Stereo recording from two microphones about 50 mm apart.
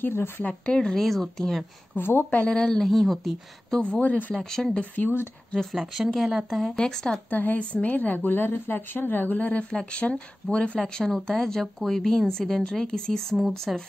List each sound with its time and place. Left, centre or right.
0.0 s speech: left
0.4 s speech: left
0.7 s speech: centre
2.0 s speech: left
2.3 s speech: centre
2.8 s a woman's voice: centre
3.9 s a woman's voice: left
4.4 s speech: centre
4.7 s a woman's voice: left
5.7 s a woman's voice: centre
6.8 s speech: centre
7.2 s a woman's voice: left
9.7 s speech: centre
13.7 s speech: centre